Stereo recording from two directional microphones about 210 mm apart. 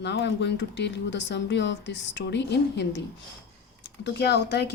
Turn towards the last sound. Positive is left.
turn(degrees=50)  # may be behind; listen again after turning